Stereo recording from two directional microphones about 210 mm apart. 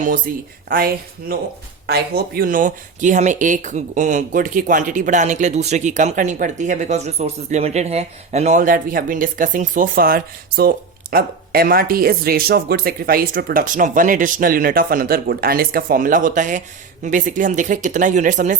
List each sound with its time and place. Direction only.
0.3 s speech: 45° right (ahead or behind)
1.9 s speech: 50° right (ahead or behind)